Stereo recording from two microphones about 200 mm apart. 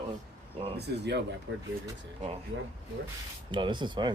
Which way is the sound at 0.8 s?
55° right (ahead or behind).